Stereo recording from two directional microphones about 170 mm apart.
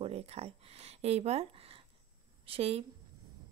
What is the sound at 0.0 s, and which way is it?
A woman's voice, 35° right (ahead or behind).